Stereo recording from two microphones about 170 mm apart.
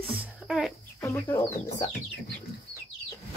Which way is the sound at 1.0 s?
15° left (ahead or behind).